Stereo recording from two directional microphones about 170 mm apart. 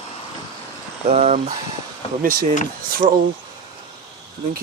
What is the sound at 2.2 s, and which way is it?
Speech, 60° right (ahead or behind).